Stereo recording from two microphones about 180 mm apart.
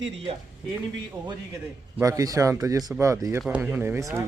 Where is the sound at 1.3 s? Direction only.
20° right (ahead or behind).